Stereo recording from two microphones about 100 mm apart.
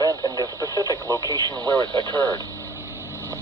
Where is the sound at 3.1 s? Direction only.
30° right (ahead or behind).